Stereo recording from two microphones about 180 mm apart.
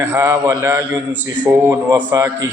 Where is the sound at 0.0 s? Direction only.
15° right (ahead or behind).